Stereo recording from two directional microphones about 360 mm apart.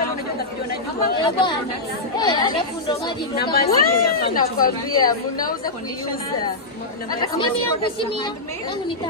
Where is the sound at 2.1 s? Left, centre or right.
Centre.